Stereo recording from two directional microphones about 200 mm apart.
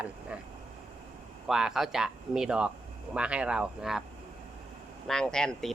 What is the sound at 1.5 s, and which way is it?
Speech, centre (ahead or behind).